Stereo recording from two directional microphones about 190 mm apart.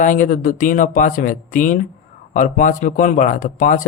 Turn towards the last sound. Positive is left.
turn(degrees=45)  # may be behind; listen again after turning